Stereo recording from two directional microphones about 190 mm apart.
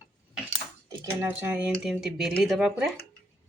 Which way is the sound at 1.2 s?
10° right (ahead or behind).